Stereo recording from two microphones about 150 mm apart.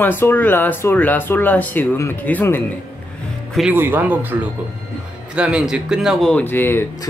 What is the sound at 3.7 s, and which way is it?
Speech, 10° right (ahead or behind).